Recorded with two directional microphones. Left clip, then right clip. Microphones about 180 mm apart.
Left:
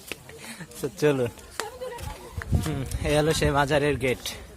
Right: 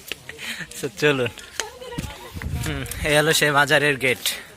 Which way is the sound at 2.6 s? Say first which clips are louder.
Right 6 dB; 5° left (ahead or behind).